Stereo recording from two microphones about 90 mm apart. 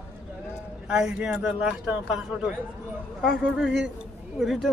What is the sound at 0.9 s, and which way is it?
A man's voice, 10° right (ahead or behind).